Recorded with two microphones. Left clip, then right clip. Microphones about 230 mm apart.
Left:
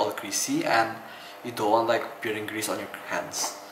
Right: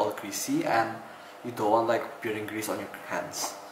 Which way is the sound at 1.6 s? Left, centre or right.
Right.